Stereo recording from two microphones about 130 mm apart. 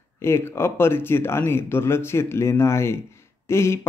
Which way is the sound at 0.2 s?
20° left (ahead or behind).